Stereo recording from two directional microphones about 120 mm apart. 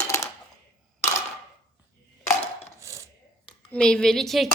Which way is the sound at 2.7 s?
25° right (ahead or behind).